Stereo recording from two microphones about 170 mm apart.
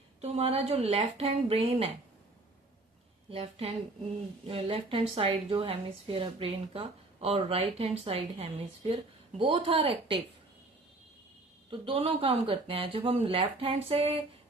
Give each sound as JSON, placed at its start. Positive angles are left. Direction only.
{"t": 0.2, "sound": "speech", "side_deg": -35}
{"t": 3.2, "sound": "speech", "side_deg": -35}
{"t": 11.7, "sound": "speech", "side_deg": -35}